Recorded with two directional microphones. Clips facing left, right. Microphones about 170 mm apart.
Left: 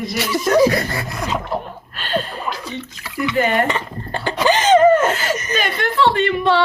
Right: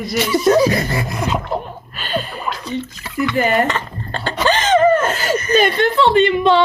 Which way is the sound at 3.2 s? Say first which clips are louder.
Right 1 dB; 15° left (ahead or behind).